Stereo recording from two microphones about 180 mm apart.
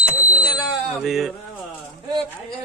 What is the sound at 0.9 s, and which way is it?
Music, centre (ahead or behind).